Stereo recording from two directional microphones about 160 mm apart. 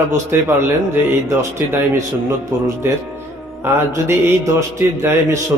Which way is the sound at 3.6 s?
15° right (ahead or behind).